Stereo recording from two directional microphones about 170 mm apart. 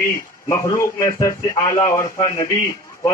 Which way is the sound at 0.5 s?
15° left (ahead or behind).